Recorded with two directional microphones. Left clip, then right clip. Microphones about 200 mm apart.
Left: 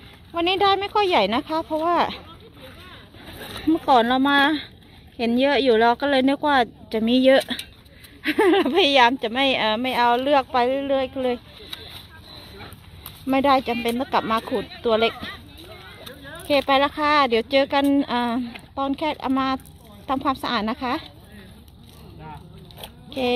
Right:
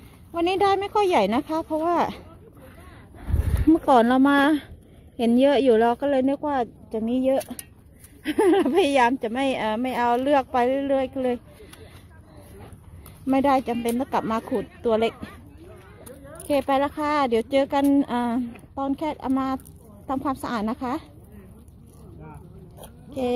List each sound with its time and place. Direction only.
0.3 s a woman's voice: 15° right (ahead or behind)
3.5 s a woman's voice: 15° right (ahead or behind); by 7.5 s 15° left (ahead or behind)
8.2 s a woman's voice: 5° right (ahead or behind)
13.3 s a woman's voice: 10° right (ahead or behind)
16.4 s a woman's voice: 5° right (ahead or behind)